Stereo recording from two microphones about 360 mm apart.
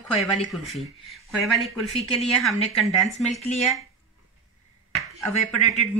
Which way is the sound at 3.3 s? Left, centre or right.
Centre.